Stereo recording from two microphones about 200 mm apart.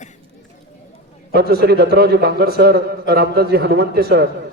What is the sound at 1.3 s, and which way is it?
A man's voice, 50° right (ahead or behind).